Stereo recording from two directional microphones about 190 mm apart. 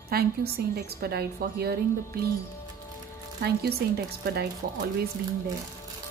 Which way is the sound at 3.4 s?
55° right (ahead or behind).